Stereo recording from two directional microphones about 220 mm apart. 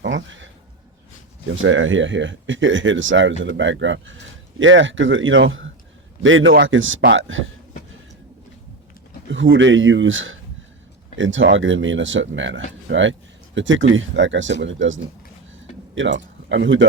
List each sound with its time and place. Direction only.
0.0 s a sound: 55° right (ahead or behind)
1.5 s speech: 60° right (ahead or behind)
9.3 s speech: 60° right (ahead or behind)
16.0 s speech: 55° right (ahead or behind)